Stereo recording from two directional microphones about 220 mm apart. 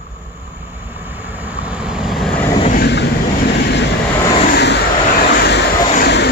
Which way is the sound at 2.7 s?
50° left (ahead or behind).